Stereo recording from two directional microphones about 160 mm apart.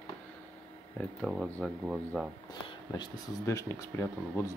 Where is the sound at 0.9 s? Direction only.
Centre (ahead or behind).